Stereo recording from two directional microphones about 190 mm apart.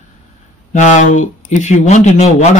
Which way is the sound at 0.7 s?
40° left (ahead or behind).